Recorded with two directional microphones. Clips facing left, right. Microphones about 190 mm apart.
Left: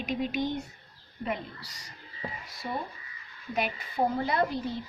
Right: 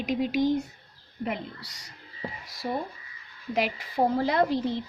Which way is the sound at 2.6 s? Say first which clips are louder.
Right 4 dB; 40° right (ahead or behind).